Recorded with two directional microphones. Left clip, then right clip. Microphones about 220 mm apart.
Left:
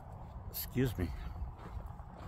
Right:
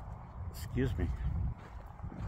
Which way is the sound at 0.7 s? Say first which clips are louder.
Even; 5° left (ahead or behind).